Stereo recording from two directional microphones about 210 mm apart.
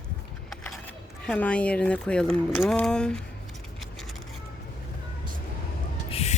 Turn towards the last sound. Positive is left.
turn(degrees=30)  # may be behind; listen again after turning